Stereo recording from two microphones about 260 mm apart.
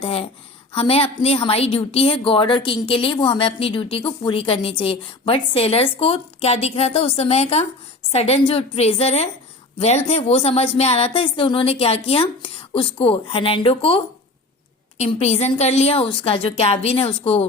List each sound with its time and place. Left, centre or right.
0.0 s a woman's voice: left